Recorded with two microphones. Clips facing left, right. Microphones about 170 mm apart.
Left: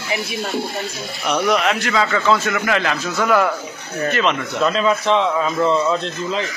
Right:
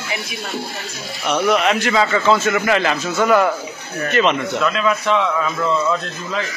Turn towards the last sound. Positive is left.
turn(degrees=25)  # may be behind; listen again after turning